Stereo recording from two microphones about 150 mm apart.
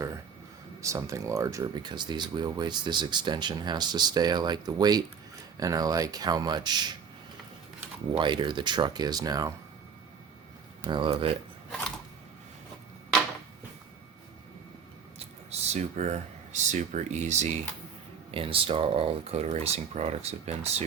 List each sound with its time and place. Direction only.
0.8 s speech: 20° right (ahead or behind)
8.1 s speech: 30° right (ahead or behind)
10.8 s speech: 35° right (ahead or behind)
15.4 s speech: 50° right (ahead or behind)